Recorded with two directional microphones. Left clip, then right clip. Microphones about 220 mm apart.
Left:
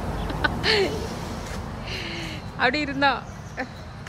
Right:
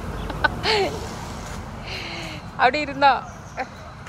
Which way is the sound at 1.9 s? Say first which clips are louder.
Right 1 dB; 10° left (ahead or behind).